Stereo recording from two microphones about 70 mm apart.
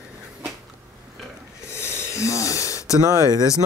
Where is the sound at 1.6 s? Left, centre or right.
Left.